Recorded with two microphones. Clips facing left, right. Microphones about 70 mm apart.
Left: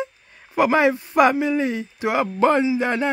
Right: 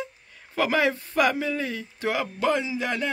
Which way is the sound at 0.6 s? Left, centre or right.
Left.